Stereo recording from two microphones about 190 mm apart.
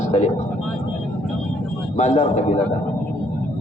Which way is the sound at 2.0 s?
35° left (ahead or behind).